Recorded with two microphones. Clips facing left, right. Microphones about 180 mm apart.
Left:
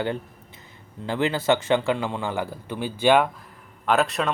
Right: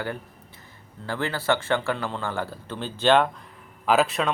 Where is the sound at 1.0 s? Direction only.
20° left (ahead or behind).